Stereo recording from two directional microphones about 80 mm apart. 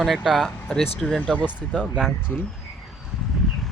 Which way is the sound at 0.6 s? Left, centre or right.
Centre.